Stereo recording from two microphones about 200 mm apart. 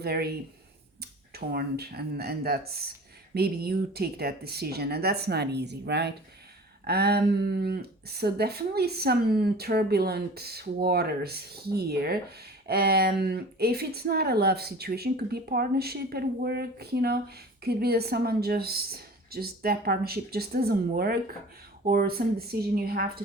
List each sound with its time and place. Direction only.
0.0 s speech: 50° right (ahead or behind)